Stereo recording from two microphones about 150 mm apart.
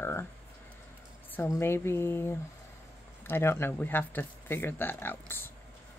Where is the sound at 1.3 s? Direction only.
15° left (ahead or behind).